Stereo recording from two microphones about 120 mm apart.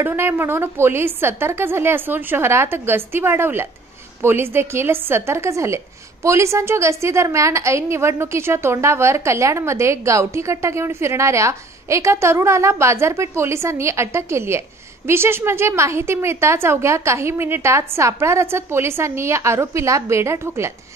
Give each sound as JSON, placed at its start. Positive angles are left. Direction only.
{"t": 0.0, "sound": "a woman's voice", "side_deg": -15}